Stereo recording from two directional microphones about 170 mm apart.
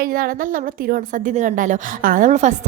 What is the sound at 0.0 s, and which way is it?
A woman's voice, 60° right (ahead or behind).